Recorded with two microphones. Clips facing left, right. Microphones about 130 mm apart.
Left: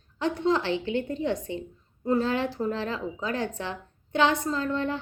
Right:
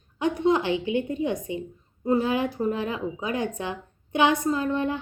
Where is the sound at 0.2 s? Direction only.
15° right (ahead or behind).